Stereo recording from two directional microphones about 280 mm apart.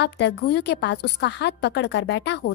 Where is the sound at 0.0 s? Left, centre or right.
Left.